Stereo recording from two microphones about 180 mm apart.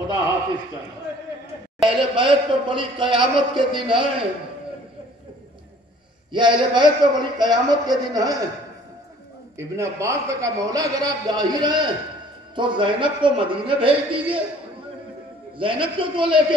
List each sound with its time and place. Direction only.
1.8 s a man's voice: 25° right (ahead or behind)
6.3 s a man's voice: 25° right (ahead or behind)
9.6 s a man's voice: 15° right (ahead or behind)
15.5 s a man's voice: 30° right (ahead or behind)